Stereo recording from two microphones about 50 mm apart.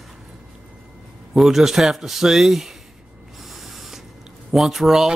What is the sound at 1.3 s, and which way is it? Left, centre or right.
Speech, centre.